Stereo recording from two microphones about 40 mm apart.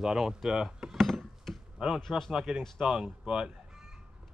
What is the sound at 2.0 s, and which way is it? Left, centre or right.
Speech, centre.